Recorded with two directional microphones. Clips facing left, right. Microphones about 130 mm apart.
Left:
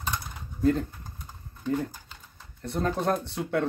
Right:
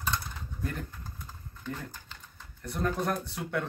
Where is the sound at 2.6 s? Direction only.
25° left (ahead or behind).